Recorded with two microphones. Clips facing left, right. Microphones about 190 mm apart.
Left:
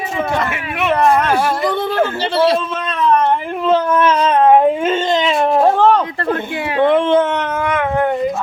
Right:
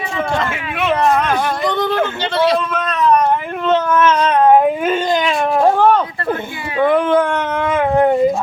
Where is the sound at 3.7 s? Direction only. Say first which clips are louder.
Right 1 dB; 30° left (ahead or behind).